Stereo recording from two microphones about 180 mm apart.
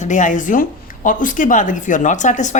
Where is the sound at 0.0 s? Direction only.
45° left (ahead or behind).